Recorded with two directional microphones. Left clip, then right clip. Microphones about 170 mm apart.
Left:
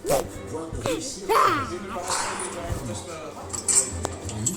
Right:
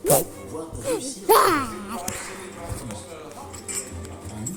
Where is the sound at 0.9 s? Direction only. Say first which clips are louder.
Right 5 dB; 60° right (ahead or behind).